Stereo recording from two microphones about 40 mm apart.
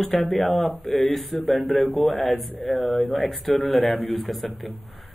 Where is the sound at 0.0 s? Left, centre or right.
Centre.